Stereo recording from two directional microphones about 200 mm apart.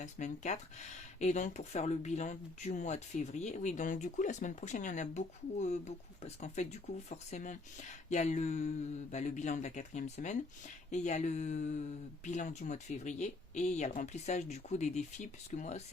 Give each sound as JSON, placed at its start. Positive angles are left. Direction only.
{"t": 0.0, "sound": "speech", "side_deg": 35}